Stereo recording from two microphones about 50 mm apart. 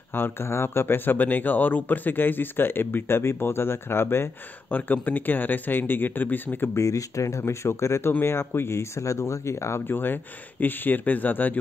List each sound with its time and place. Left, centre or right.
0.1 s speech: left
4.6 s speech: left
6.7 s speech: left
8.1 s speech: left
9.8 s speech: left